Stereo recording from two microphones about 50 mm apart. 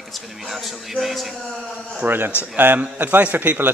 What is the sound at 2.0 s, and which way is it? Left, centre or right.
A man's voice, right.